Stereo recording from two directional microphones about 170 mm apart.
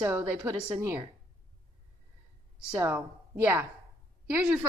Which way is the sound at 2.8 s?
10° right (ahead or behind).